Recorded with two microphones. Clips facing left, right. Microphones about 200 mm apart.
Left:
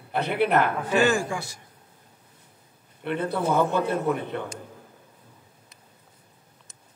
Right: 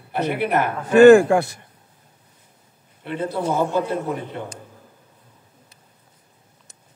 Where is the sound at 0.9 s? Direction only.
55° right (ahead or behind).